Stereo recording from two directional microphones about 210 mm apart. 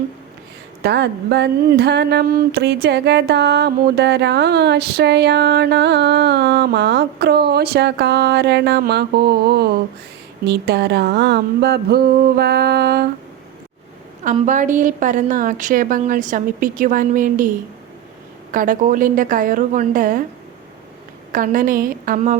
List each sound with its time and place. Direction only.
0.8 s a sound: 55° right (ahead or behind)
14.3 s a woman's voice: 35° right (ahead or behind)
18.5 s a woman's voice: 40° right (ahead or behind)
21.3 s a woman's voice: 40° right (ahead or behind)